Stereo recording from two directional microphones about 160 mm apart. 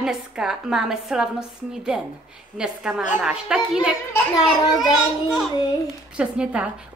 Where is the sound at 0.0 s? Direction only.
5° right (ahead or behind).